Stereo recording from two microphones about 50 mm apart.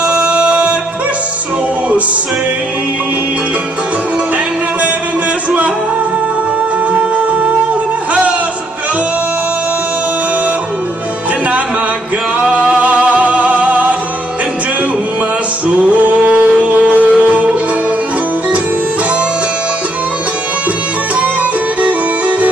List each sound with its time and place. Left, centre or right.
0.0 s music: right
8.1 s music: right
12.4 s music: right
15.8 s a sound: right
21.2 s music: right